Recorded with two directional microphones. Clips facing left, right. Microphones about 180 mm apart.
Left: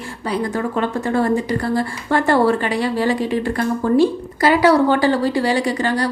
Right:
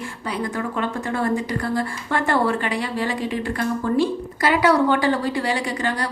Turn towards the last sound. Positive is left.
turn(degrees=35)  # may be behind; listen again after turning